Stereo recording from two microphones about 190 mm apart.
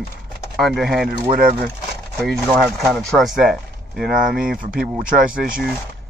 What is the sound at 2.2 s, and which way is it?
Speech, centre (ahead or behind).